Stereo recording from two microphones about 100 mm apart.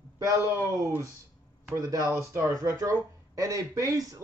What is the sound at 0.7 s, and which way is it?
Speech, 35° right (ahead or behind).